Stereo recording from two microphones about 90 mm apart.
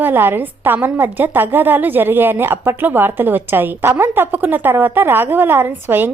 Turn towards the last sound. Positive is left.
turn(degrees=-25)  # may be behind; listen again after turning